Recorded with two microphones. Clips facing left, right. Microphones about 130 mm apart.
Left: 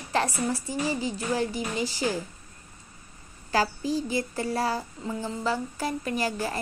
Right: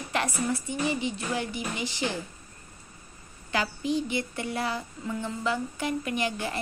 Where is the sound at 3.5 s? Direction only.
35° left (ahead or behind).